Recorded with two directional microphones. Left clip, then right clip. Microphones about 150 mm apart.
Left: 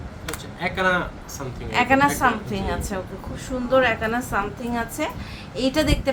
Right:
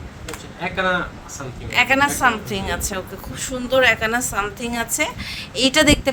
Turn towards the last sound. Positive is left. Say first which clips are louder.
# right 6 dB
turn(degrees=-65)  # may be behind; listen again after turning